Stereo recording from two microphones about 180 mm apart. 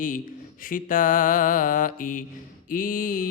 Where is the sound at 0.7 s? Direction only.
50° left (ahead or behind).